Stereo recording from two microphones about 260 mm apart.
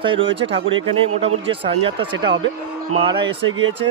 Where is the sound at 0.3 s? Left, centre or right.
Right.